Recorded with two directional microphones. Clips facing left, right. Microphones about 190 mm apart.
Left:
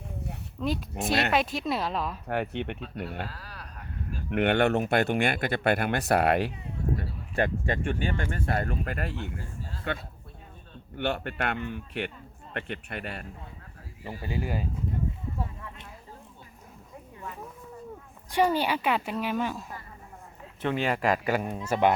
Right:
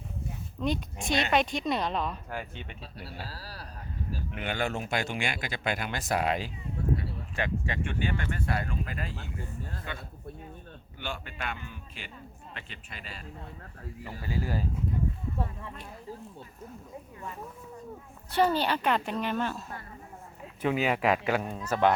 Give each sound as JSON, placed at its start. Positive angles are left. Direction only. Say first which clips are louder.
{"t": 0.6, "sound": "speech", "louder": "left 1 dB", "side_deg": 0}
{"t": 2.2, "sound": "speech", "louder": "left 9 dB", "side_deg": 65}
{"t": 3.2, "sound": "a sound", "louder": "even", "side_deg": -35}
{"t": 4.3, "sound": "speech", "louder": "left 10 dB", "side_deg": 65}
{"t": 14.0, "sound": "speech", "louder": "left 2 dB", "side_deg": 20}
{"t": 18.3, "sound": "a woman's voice", "louder": "left 1 dB", "side_deg": 10}
{"t": 20.6, "sound": "a woman's voice", "louder": "even", "side_deg": -5}